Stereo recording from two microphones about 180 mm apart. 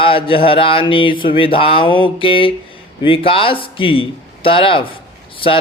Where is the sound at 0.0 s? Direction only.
30° left (ahead or behind).